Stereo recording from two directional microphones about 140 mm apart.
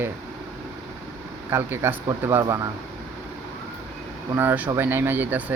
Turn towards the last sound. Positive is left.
turn(degrees=-15)  # may be behind; listen again after turning